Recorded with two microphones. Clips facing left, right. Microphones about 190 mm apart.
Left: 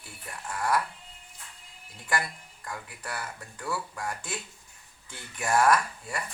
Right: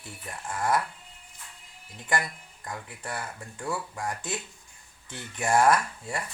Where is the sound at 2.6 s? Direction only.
20° right (ahead or behind).